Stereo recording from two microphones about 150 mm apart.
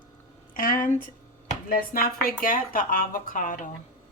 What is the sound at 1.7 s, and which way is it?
A woman's voice, 80° left.